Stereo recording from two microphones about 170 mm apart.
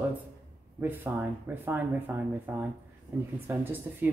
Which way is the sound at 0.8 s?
10° right (ahead or behind).